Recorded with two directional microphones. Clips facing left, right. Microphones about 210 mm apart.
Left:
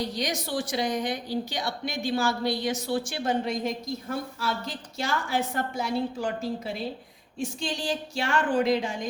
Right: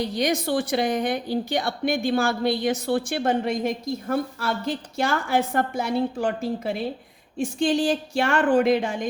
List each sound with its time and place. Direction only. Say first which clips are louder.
0.1 s a woman's voice: right 7 dB; 55° right (ahead or behind)